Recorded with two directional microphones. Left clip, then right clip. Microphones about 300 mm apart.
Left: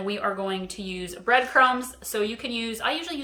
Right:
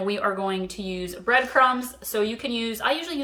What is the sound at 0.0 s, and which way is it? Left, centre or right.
Speech, centre.